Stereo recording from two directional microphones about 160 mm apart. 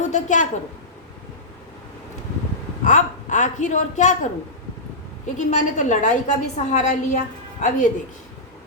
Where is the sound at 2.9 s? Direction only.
50° left (ahead or behind).